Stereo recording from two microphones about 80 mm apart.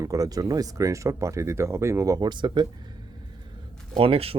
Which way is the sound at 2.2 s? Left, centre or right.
Right.